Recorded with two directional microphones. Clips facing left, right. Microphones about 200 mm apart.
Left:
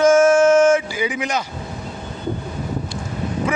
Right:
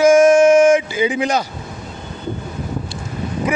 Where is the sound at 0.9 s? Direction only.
25° right (ahead or behind).